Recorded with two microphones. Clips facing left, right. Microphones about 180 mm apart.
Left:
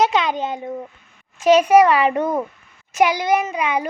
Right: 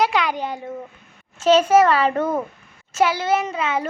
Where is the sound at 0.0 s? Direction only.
20° left (ahead or behind).